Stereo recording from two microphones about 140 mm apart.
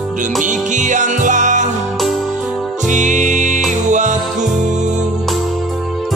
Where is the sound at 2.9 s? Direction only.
60° right (ahead or behind).